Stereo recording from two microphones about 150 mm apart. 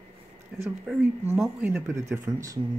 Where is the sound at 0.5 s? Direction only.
5° right (ahead or behind).